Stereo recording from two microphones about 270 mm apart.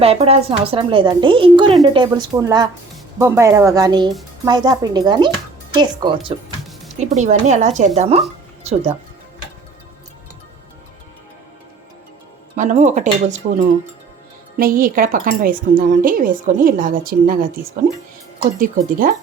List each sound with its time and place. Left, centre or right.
0.0 s speech: right
12.5 s a woman's voice: right